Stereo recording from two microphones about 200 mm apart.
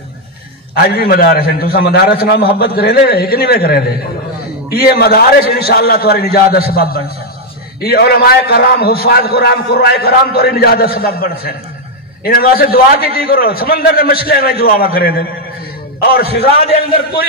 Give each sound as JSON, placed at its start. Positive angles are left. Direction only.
{"t": 0.7, "sound": "a man's voice", "side_deg": 50}